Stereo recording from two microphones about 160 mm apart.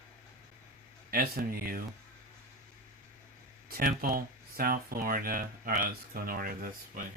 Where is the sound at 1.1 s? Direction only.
65° right (ahead or behind).